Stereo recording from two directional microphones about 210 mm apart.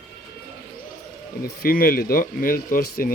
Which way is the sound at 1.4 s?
45° left (ahead or behind).